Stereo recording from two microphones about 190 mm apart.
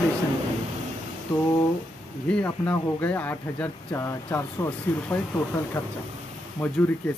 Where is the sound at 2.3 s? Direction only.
5° left (ahead or behind).